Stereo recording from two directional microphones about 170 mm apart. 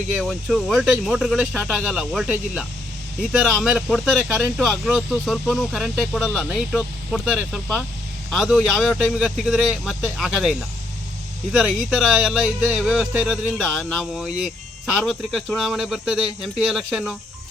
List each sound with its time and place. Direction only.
0.2 s a man's voice: centre (ahead or behind)
11.5 s speech: 5° right (ahead or behind)